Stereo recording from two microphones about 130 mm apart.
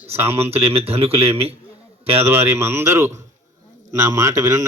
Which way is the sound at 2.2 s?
20° right (ahead or behind).